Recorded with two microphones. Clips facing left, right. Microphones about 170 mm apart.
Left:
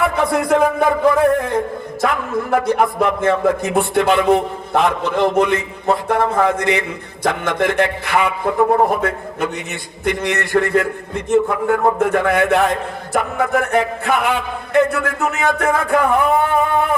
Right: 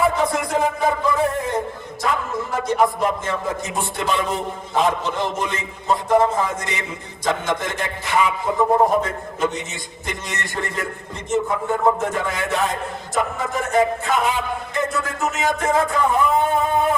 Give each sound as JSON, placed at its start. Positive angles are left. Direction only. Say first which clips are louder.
{"t": 0.0, "sound": "a man's voice", "louder": "left 2 dB", "side_deg": 60}